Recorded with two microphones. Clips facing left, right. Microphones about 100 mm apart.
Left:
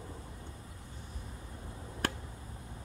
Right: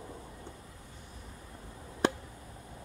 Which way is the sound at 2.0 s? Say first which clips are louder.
Right 7 dB; 20° right (ahead or behind).